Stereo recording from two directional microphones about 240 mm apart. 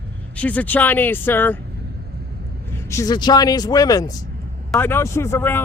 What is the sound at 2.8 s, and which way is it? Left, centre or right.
Speech, centre.